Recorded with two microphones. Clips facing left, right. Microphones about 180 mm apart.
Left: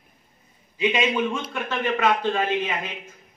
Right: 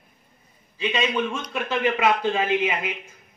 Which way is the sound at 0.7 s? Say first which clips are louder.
Left 3 dB; 15° left (ahead or behind).